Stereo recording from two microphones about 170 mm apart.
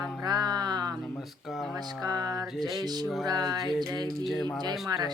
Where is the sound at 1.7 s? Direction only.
25° right (ahead or behind).